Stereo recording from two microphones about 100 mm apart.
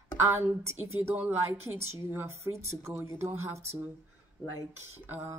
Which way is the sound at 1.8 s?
25° right (ahead or behind).